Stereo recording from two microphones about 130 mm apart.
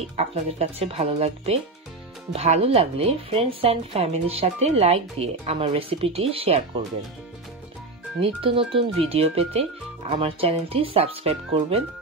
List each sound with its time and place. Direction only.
0.0 s speech: 55° right (ahead or behind)
8.2 s speech: 45° right (ahead or behind)